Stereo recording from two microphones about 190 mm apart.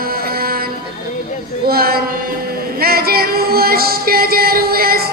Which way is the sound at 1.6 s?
55° right (ahead or behind).